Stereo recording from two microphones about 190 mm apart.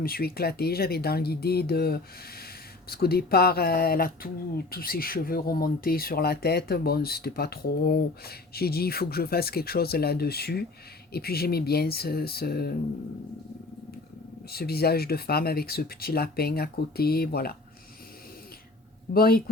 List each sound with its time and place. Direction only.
0.0 s speech: 50° left (ahead or behind)
14.5 s speech: 55° left (ahead or behind)
19.1 s speech: 50° left (ahead or behind)